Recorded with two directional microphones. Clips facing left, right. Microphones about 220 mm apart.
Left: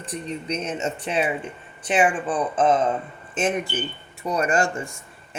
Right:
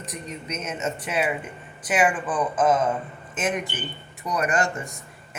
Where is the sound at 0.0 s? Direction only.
30° left (ahead or behind).